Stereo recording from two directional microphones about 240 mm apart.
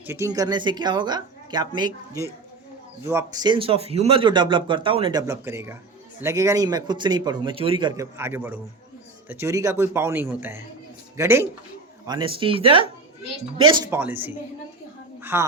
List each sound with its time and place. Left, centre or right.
0.1 s a man's voice: centre
13.9 s a man's voice: centre